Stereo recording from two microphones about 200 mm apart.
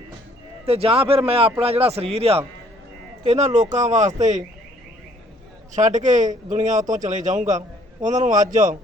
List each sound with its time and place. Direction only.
0.6 s speech: 30° right (ahead or behind)
5.7 s speech: 35° right (ahead or behind)